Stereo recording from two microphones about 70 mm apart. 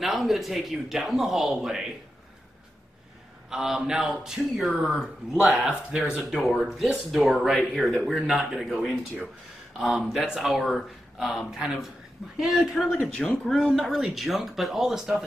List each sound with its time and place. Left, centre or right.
0.0 s speech: centre
3.4 s a man's voice: centre
13.0 s speech: centre
13.5 s speech: centre